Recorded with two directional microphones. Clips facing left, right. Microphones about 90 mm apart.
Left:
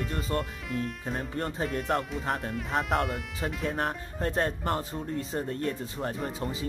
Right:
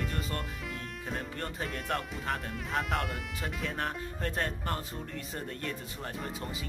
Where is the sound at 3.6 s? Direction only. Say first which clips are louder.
Left 4 dB; 35° left (ahead or behind).